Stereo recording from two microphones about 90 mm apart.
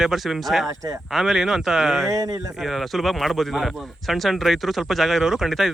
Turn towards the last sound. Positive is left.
turn(degrees=-5)  # may be behind; listen again after turning